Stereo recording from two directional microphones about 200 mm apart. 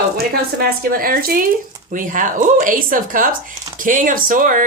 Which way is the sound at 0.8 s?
45° right (ahead or behind).